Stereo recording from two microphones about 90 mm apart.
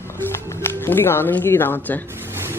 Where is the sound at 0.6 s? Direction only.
25° left (ahead or behind).